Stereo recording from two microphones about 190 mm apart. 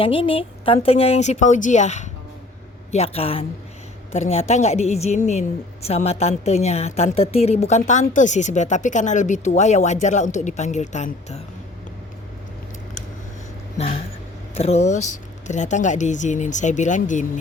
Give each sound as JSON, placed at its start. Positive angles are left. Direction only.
{"t": 0.0, "sound": "a woman's voice", "side_deg": 30}
{"t": 14.5, "sound": "a woman's voice", "side_deg": 35}